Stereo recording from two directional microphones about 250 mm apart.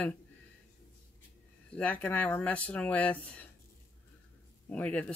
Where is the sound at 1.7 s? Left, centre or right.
Centre.